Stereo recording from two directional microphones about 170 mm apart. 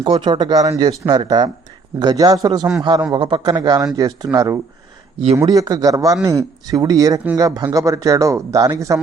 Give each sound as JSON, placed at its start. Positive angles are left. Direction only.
{"t": 0.0, "sound": "speech", "side_deg": -30}